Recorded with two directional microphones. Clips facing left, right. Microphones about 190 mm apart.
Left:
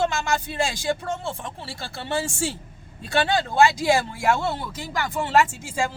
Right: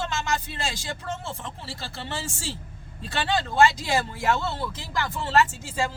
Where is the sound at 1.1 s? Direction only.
55° left (ahead or behind).